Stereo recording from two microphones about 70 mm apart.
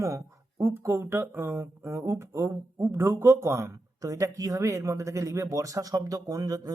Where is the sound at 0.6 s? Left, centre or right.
Right.